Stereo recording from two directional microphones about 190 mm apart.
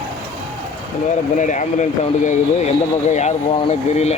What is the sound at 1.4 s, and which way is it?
Speech, 40° left (ahead or behind).